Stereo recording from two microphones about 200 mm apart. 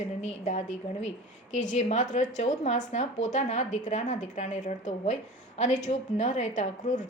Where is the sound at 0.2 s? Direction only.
35° left (ahead or behind).